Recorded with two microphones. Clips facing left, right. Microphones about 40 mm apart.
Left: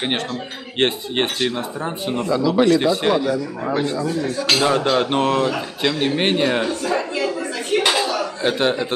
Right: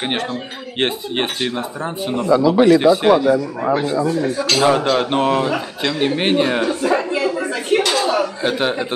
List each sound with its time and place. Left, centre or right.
0.7 s speech: centre
2.2 s speech: centre
6.7 s a sound: centre
8.4 s speech: centre